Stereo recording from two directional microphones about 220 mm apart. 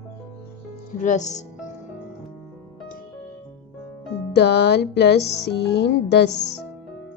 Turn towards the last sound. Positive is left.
turn(degrees=50)  # may be behind; listen again after turning